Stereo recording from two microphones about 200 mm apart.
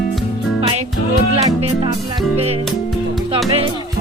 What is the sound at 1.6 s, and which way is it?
Music, 25° right (ahead or behind).